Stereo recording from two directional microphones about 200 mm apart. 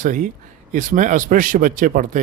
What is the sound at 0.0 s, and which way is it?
A man's voice, 40° right (ahead or behind).